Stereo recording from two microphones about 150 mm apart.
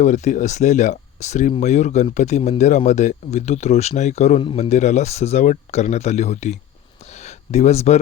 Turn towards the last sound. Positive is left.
turn(degrees=45)  # may be behind; listen again after turning